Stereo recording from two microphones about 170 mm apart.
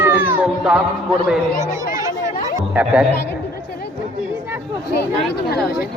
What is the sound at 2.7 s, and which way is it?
Speech, 5° right (ahead or behind).